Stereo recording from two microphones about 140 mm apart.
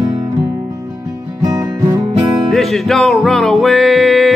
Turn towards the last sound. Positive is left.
turn(degrees=0)  # may be behind; listen again after turning